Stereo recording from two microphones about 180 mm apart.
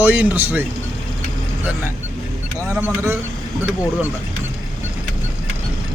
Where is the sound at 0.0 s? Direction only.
10° right (ahead or behind).